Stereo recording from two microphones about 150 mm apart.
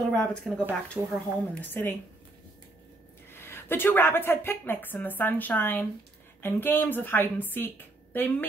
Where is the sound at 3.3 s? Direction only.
15° left (ahead or behind).